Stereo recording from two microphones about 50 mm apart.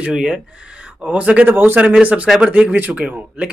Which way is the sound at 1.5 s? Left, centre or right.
Right.